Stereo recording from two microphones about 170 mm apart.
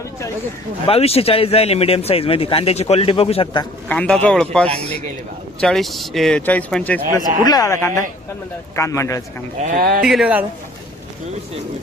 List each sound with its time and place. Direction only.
0.9 s speech: 35° left (ahead or behind)
3.8 s speech: 5° left (ahead or behind)
7.4 s speech: 20° left (ahead or behind)
9.7 s speech: 60° right (ahead or behind)
10.1 s speech: 5° right (ahead or behind)